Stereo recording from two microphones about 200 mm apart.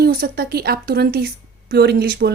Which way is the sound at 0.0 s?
50° right (ahead or behind).